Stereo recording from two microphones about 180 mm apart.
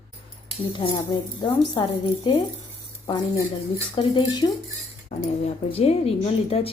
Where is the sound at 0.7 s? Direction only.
25° left (ahead or behind).